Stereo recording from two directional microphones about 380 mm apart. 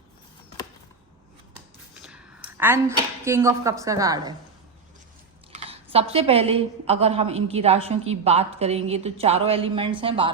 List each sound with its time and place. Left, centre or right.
2.0 s a sound: centre
3.2 s a woman's voice: centre
5.5 s a woman's voice: centre